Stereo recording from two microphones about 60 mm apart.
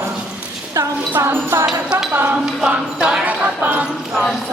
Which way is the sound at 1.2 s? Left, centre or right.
Right.